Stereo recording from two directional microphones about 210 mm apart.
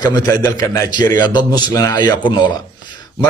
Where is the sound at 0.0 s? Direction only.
20° left (ahead or behind).